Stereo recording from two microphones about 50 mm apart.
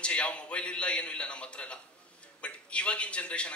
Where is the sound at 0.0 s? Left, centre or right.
Left.